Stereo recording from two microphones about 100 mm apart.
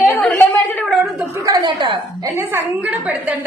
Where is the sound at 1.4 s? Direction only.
45° right (ahead or behind).